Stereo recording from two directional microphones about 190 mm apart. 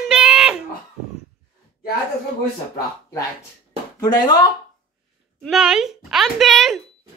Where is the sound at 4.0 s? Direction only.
20° left (ahead or behind).